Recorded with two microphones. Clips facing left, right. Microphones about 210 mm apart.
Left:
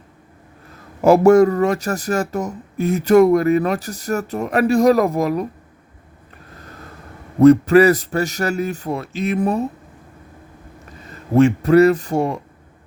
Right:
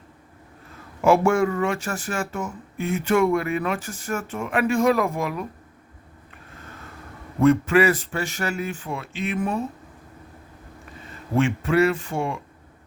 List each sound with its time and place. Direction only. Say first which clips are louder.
1.0 s speech: left 8 dB; 40° left (ahead or behind)
6.5 s a sound: left 3 dB; 40° left (ahead or behind)
7.3 s speech: left 7 dB; 40° left (ahead or behind)
11.3 s speech: left 8 dB; 40° left (ahead or behind)